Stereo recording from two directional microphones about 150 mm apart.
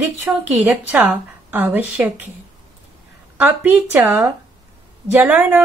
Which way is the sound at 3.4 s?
10° right (ahead or behind).